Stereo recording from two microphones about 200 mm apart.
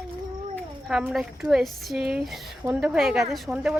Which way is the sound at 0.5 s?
Centre (ahead or behind).